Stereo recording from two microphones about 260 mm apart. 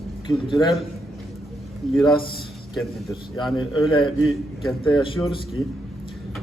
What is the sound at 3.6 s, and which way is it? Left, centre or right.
A man's voice, centre.